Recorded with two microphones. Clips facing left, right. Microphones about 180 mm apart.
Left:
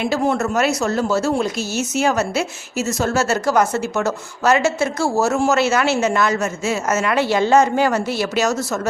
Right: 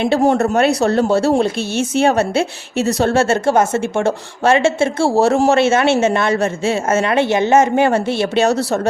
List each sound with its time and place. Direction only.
0.2 s a woman's voice: 35° right (ahead or behind)